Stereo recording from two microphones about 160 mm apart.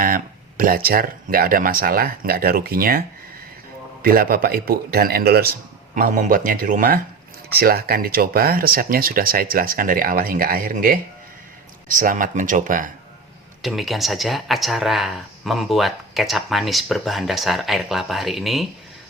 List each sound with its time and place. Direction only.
0.0 s speech: 60° right (ahead or behind)
4.0 s a man's voice: 65° right (ahead or behind)
5.9 s speech: 55° right (ahead or behind)
7.5 s speech: 75° right (ahead or behind); by 12.9 s 55° right (ahead or behind)
13.6 s speech: centre (ahead or behind)